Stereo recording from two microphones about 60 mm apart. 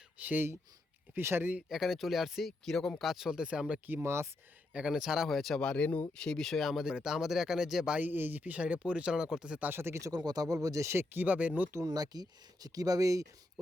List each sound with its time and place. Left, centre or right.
0.2 s speech: right
1.1 s speech: right
1.7 s speech: centre
3.0 s speech: centre
3.8 s speech: right
4.7 s speech: centre
5.5 s speech: centre
6.2 s speech: centre
7.9 s speech: right
9.6 s speech: right
10.0 s speech: right
10.9 s speech: right
11.9 s speech: right